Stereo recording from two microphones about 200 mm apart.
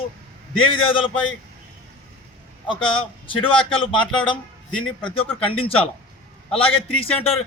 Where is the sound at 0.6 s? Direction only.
25° left (ahead or behind).